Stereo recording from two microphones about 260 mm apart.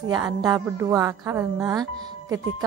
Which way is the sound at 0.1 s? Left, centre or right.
Centre.